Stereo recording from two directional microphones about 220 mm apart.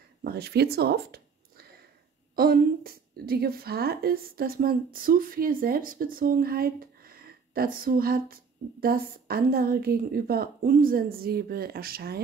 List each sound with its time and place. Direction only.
0.2 s a woman's voice: 45° right (ahead or behind)